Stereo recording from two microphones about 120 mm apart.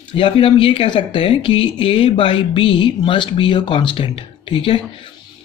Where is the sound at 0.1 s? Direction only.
50° left (ahead or behind).